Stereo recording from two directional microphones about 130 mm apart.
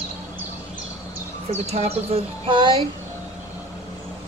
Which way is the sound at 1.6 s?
55° right (ahead or behind).